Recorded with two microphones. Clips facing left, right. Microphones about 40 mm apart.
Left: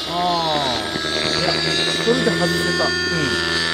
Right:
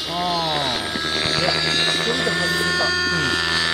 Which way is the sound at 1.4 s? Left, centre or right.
Centre.